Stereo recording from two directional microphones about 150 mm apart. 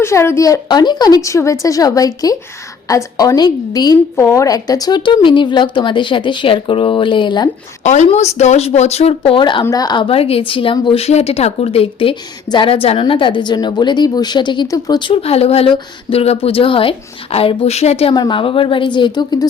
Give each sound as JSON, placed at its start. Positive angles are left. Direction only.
{"t": 0.0, "sound": "a woman's voice", "side_deg": 20}
{"t": 7.9, "sound": "a woman's voice", "side_deg": 50}
{"t": 18.1, "sound": "a woman's voice", "side_deg": 30}